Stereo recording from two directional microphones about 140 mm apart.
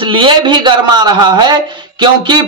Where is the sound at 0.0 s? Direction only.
35° right (ahead or behind).